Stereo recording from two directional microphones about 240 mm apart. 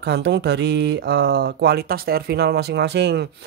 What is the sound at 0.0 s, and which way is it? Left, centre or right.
Speech, right.